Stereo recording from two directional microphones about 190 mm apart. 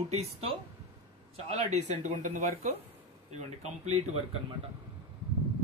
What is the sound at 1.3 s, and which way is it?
Speech, 35° right (ahead or behind).